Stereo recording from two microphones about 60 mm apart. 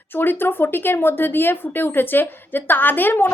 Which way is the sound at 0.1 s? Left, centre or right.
Left.